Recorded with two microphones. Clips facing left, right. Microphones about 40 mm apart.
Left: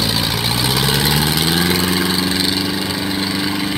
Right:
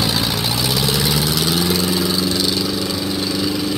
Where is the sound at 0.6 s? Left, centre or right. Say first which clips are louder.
Left 3 dB; left.